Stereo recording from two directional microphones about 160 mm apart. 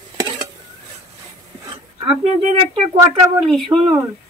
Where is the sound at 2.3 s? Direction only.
45° right (ahead or behind).